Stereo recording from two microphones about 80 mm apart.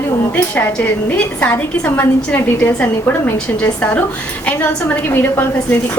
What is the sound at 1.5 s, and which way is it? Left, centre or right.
A woman's voice, left.